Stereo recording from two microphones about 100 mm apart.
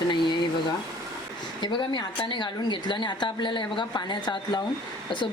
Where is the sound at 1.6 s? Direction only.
50° left (ahead or behind).